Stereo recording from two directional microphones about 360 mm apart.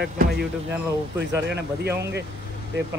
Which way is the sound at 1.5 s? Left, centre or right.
Right.